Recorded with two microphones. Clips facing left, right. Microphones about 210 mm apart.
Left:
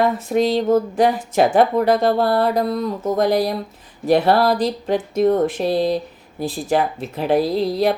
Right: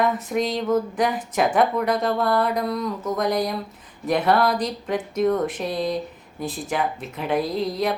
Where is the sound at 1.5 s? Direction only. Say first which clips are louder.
Left 5 dB; 30° left (ahead or behind).